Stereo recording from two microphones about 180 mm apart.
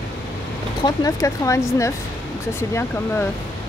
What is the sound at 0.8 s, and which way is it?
Speech, 20° left (ahead or behind).